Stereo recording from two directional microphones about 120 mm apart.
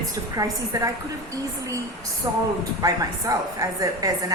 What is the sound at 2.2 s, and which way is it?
A woman's voice, 35° right (ahead or behind).